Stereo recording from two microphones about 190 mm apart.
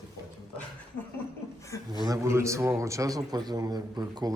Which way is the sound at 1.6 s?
15° left (ahead or behind).